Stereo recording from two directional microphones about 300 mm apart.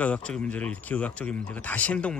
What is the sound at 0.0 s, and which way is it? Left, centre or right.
Speech, centre.